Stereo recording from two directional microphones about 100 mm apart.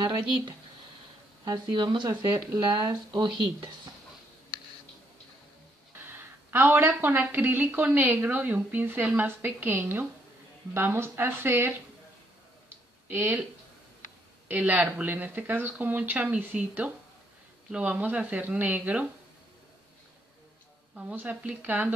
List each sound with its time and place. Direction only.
0.0 s speech: 45° right (ahead or behind)
6.7 s speech: 20° right (ahead or behind)
12.6 s a sound: 20° right (ahead or behind)
14.5 s speech: 15° right (ahead or behind)
20.9 s speech: 15° right (ahead or behind)